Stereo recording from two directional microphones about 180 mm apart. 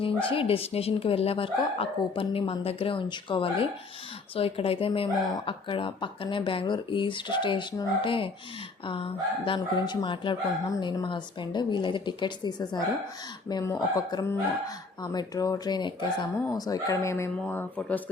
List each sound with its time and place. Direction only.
0.0 s speech: 30° left (ahead or behind); by 18.0 s 10° left (ahead or behind)